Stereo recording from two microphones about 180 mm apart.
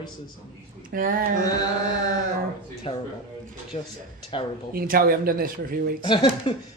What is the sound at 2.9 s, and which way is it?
Speech, 30° left (ahead or behind).